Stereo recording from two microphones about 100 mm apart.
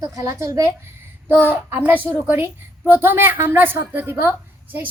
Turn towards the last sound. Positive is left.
turn(degrees=-20)  # may be behind; listen again after turning